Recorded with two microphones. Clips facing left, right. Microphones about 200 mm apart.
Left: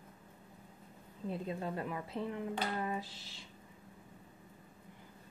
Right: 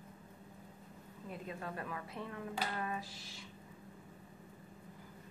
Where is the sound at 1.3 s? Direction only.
25° left (ahead or behind).